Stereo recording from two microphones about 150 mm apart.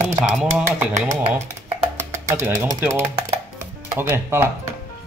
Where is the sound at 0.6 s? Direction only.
20° right (ahead or behind).